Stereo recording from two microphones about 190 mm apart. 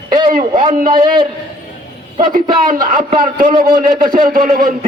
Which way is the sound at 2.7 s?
45° right (ahead or behind).